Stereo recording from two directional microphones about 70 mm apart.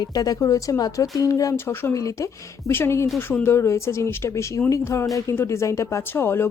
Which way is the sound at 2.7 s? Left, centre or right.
Left.